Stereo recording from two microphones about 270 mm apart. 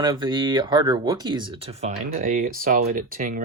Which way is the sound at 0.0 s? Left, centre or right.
Centre.